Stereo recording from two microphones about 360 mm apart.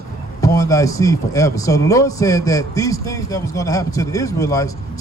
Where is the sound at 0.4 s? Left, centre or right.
Centre.